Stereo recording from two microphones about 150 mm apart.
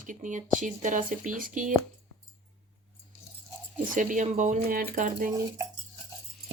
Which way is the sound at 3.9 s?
55° right (ahead or behind).